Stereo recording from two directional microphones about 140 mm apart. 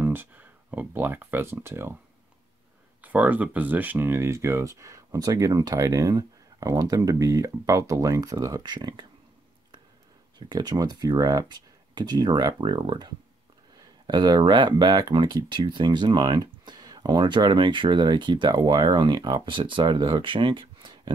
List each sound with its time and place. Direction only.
0.0 s speech: 15° right (ahead or behind)
3.0 s speech: 10° right (ahead or behind); by 9.0 s 30° right (ahead or behind)
10.5 s speech: 30° right (ahead or behind)